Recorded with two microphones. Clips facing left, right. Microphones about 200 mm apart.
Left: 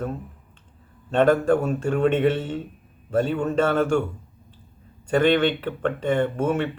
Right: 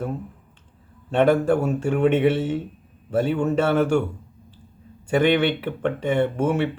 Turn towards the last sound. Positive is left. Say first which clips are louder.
# right 1 dB
turn(degrees=-10)  # may be behind; listen again after turning